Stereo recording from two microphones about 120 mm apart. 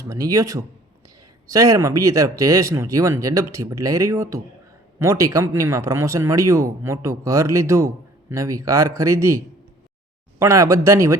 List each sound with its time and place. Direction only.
0.0 s a man's voice: 25° right (ahead or behind)
10.4 s a man's voice: 25° right (ahead or behind)